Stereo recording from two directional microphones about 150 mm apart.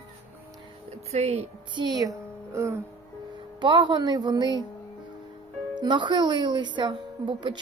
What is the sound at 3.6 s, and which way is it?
A woman's voice, 30° right (ahead or behind).